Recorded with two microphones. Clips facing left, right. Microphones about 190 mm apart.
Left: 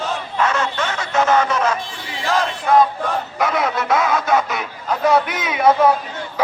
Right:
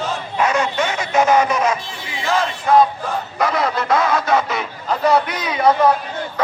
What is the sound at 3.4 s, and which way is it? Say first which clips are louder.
Speech: right 1 dB; centre (ahead or behind).